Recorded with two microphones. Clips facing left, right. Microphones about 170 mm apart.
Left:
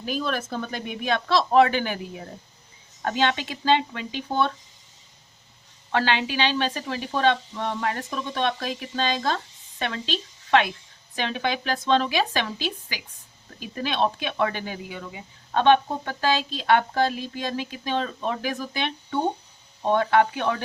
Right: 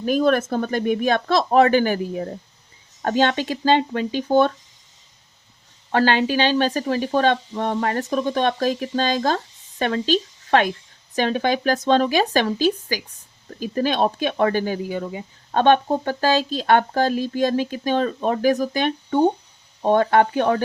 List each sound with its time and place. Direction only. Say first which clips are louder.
0.0 s speech: right 10 dB; 50° right (ahead or behind)
5.9 s speech: right 6 dB; 45° right (ahead or behind)